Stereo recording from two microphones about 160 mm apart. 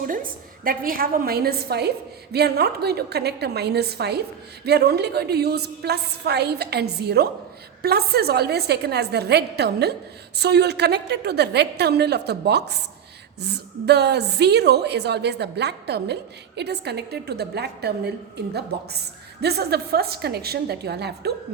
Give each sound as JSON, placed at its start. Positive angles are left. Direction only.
{"t": 0.1, "sound": "a woman's voice", "side_deg": -60}
{"t": 7.8, "sound": "a woman's voice", "side_deg": -80}